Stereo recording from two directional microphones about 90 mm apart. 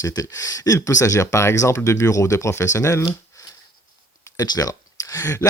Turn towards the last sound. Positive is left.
turn(degrees=35)  # may be behind; listen again after turning